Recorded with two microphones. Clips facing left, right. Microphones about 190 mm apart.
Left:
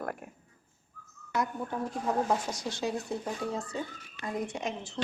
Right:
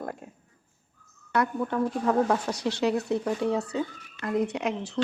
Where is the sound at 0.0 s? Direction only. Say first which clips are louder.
Right 1 dB; 25° right (ahead or behind).